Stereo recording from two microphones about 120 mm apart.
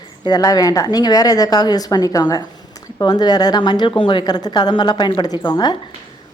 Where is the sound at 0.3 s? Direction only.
35° left (ahead or behind).